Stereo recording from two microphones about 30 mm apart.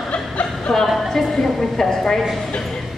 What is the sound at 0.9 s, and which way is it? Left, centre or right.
A woman's voice, centre.